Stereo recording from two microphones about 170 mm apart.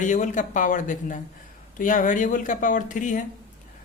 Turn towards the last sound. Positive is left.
turn(degrees=50)  # may be behind; listen again after turning